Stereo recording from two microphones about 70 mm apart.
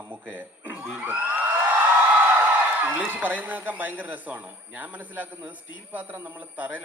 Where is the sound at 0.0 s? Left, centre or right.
Right.